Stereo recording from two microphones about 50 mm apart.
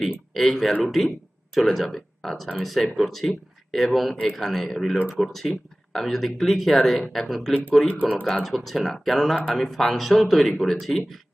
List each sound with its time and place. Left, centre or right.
0.3 s speech: centre
7.9 s speech: right
8.1 s speech: centre